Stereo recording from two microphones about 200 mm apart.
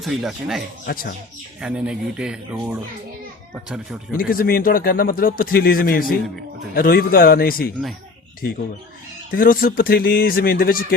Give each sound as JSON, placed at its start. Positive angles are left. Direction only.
{"t": 0.0, "sound": "speech", "side_deg": 0}
{"t": 0.9, "sound": "a man's voice", "side_deg": 45}
{"t": 1.6, "sound": "speech", "side_deg": -5}
{"t": 4.1, "sound": "a man's voice", "side_deg": 45}
{"t": 9.3, "sound": "a man's voice", "side_deg": 45}